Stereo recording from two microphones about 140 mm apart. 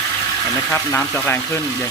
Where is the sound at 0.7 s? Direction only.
15° left (ahead or behind).